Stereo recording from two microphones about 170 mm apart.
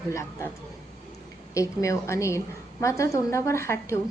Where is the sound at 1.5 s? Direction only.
20° left (ahead or behind).